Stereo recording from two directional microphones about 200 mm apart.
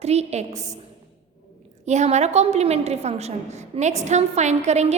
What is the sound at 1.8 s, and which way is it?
A woman's voice, 35° right (ahead or behind).